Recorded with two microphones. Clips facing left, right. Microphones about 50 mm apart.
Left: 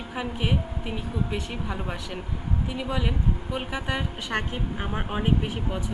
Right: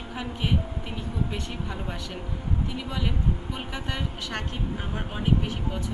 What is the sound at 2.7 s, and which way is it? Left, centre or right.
A woman's voice, centre.